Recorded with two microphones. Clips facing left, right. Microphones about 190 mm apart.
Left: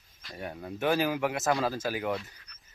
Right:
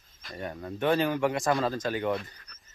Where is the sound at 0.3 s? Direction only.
5° left (ahead or behind).